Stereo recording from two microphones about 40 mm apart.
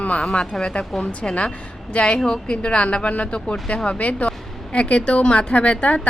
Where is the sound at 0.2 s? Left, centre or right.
Centre.